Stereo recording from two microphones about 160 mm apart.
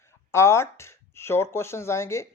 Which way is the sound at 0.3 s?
15° left (ahead or behind).